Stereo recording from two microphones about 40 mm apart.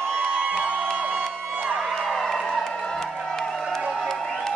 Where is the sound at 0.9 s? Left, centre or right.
Right.